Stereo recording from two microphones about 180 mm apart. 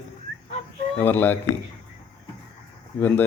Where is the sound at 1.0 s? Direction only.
10° left (ahead or behind).